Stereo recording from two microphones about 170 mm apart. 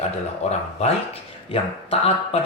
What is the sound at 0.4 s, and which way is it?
Speech, 40° left (ahead or behind).